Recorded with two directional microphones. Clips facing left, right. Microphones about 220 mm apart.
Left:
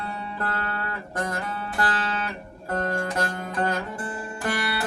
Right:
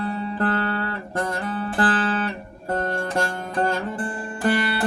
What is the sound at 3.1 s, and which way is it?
Music, 30° right (ahead or behind).